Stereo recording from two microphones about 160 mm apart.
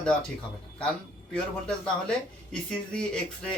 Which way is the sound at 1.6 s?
5° left (ahead or behind).